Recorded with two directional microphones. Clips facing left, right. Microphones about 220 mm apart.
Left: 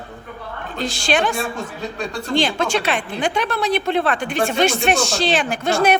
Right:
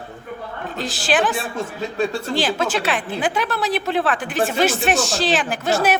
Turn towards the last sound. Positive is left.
turn(degrees=-5)  # may be behind; listen again after turning